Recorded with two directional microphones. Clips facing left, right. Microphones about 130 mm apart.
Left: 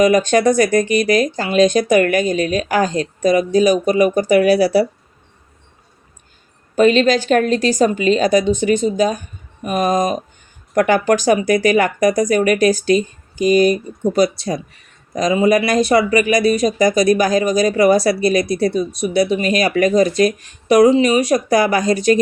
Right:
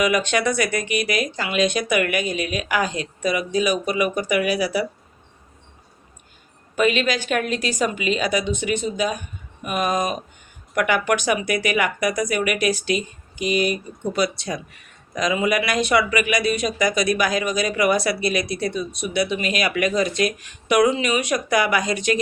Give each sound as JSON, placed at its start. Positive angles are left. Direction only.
{"t": 0.0, "sound": "speech", "side_deg": 40}
{"t": 6.7, "sound": "speech", "side_deg": 35}